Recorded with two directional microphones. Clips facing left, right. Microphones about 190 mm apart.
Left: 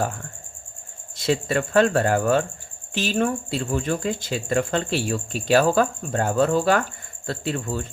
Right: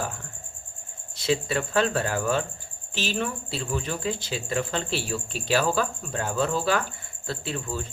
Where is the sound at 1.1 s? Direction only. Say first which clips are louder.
Left 3 dB; 50° left (ahead or behind).